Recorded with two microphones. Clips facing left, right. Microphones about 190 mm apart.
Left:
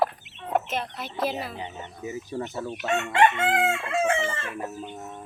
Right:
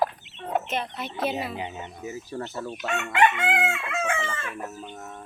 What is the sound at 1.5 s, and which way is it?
Speech, 15° right (ahead or behind).